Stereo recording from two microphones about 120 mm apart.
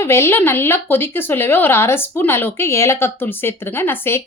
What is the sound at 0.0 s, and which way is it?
Speech, 20° left (ahead or behind).